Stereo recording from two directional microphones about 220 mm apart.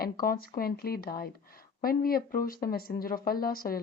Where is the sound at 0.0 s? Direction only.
40° left (ahead or behind).